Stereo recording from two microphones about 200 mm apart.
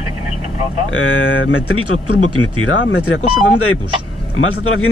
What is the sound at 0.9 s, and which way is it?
Speech, 90° left.